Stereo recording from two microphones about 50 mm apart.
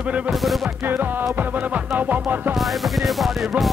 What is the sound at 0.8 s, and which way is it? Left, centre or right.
Music, right.